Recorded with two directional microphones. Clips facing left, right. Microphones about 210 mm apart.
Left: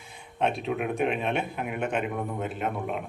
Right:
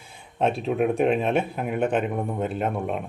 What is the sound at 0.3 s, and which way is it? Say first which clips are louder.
Speech: right 5 dB; 35° right (ahead or behind).